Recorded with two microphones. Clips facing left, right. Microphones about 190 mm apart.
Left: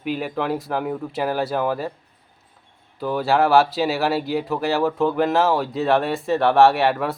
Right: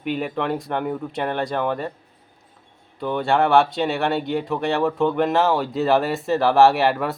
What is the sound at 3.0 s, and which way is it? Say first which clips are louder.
Speech: left 1 dB; 5° left (ahead or behind).